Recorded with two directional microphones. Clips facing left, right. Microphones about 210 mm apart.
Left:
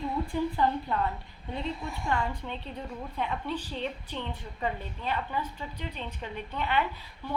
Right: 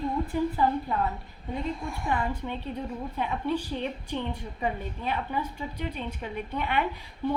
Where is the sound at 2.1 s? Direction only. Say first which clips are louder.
Right 2 dB; 10° right (ahead or behind).